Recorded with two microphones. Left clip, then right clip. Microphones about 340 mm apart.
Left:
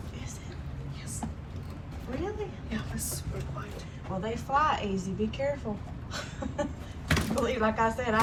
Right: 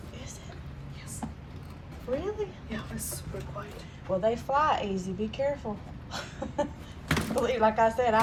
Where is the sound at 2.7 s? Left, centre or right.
Centre.